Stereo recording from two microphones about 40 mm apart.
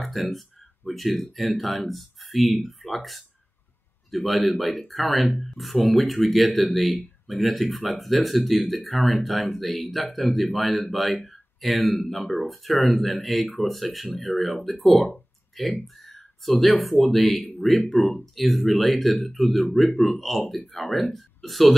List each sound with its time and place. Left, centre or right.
0.0 s speech: centre